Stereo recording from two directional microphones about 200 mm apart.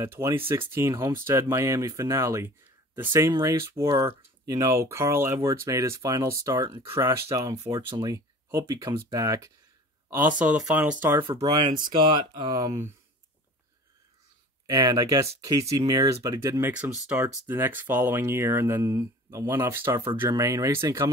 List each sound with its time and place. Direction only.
0.0 s speech: 10° right (ahead or behind)
11.8 s speech: 25° right (ahead or behind)
14.7 s speech: 20° right (ahead or behind)